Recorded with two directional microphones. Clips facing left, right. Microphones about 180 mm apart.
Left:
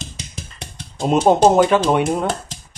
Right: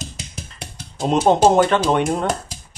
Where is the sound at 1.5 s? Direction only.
10° left (ahead or behind).